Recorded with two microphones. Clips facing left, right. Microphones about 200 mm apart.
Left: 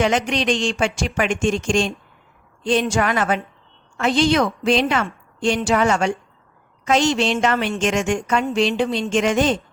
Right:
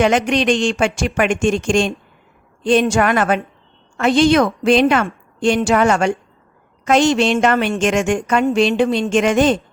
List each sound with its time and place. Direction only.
0.0 s a woman's voice: 55° right (ahead or behind)